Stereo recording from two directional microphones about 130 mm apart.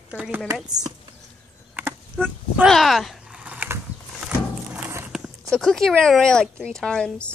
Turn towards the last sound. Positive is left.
turn(degrees=5)  # may be behind; listen again after turning